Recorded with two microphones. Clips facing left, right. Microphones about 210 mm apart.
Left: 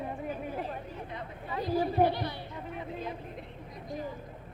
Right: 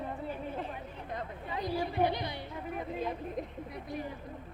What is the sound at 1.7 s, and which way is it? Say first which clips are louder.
Chatter: left 6 dB; 40° left (ahead or behind).